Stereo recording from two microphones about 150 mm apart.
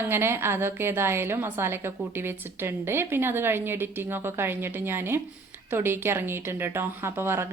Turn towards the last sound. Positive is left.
turn(degrees=-15)  # may be behind; listen again after turning